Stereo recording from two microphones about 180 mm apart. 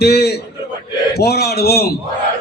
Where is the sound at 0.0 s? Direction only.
65° left (ahead or behind).